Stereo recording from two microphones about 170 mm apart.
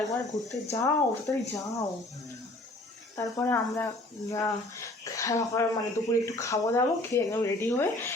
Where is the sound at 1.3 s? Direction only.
20° left (ahead or behind).